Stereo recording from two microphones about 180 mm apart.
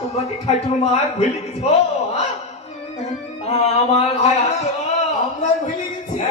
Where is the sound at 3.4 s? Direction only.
35° left (ahead or behind).